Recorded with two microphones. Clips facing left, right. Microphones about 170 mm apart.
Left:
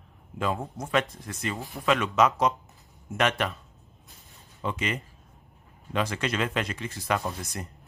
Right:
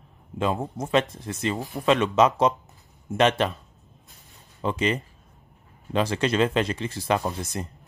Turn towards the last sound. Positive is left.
turn(degrees=-25)  # may be behind; listen again after turning